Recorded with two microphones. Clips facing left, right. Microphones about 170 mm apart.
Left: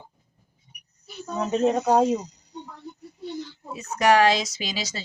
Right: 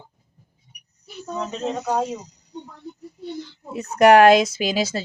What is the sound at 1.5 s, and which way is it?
Speech, 50° left (ahead or behind).